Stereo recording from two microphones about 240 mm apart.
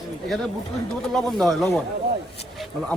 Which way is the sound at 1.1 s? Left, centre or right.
Centre.